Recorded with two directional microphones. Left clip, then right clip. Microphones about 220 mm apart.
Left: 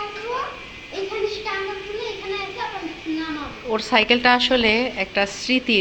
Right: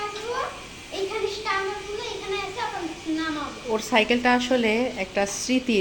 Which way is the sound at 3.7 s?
10° right (ahead or behind).